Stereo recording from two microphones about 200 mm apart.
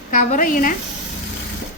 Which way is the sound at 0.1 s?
40° left (ahead or behind).